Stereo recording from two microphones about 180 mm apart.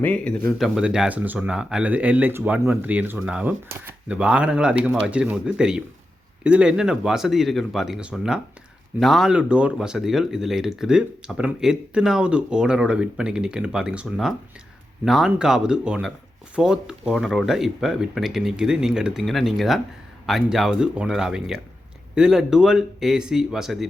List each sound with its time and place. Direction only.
0.0 s speech: 5° left (ahead or behind)
0.8 s speech: 5° right (ahead or behind)